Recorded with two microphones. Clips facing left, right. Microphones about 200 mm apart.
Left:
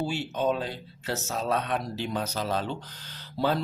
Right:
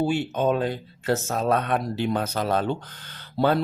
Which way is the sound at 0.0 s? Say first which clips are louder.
Right 5 dB; 55° right (ahead or behind).